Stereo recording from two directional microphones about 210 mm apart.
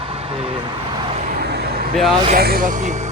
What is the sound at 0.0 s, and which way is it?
Vehicle, 25° right (ahead or behind).